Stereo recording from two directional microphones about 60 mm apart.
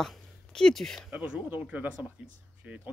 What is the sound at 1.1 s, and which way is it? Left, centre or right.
Speech, right.